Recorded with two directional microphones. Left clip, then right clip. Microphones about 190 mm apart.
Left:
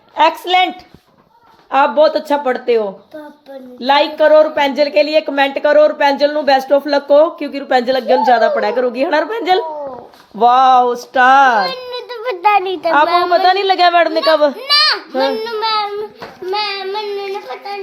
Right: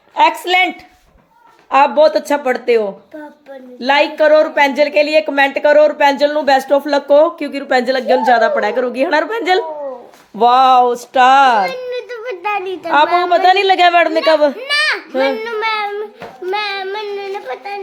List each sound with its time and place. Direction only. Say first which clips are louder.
0.4 s speech: even; 10° right (ahead or behind)
1.7 s speech: right 1 dB; 5° right (ahead or behind)
11.6 s a sound: right 1 dB; 30° left (ahead or behind)
13.2 s speech: right 1 dB; 10° right (ahead or behind)
14.5 s children playing: left 3 dB; 5° left (ahead or behind)
16.5 s child singing: even; 5° right (ahead or behind)
17.5 s a sound: right 1 dB; 5° right (ahead or behind)